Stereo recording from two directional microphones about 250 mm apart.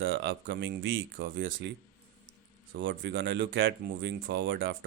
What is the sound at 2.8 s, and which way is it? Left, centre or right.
Speech, right.